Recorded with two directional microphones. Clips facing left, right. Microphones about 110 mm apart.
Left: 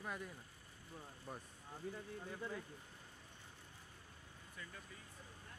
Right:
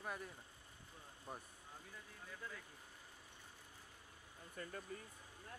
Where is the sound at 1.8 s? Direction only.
40° left (ahead or behind).